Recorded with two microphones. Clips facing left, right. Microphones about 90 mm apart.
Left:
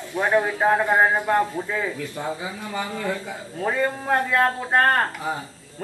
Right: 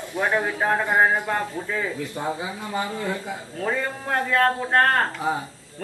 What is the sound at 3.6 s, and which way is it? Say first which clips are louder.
A man's voice: left 3 dB; 10° left (ahead or behind).